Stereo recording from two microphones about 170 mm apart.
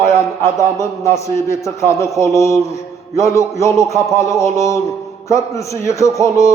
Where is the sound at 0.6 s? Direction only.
15° left (ahead or behind).